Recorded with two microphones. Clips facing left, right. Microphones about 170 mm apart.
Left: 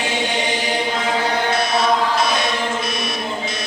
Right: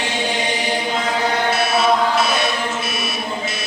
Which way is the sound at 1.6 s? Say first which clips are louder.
Right 1 dB; 5° right (ahead or behind).